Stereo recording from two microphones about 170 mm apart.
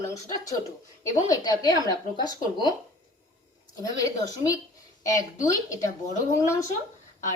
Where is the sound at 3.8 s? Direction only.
20° left (ahead or behind).